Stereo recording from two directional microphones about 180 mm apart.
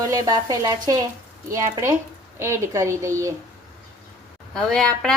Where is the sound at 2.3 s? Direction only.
15° right (ahead or behind).